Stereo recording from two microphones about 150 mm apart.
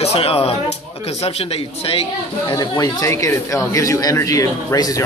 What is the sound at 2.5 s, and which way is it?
Speech, 25° left (ahead or behind).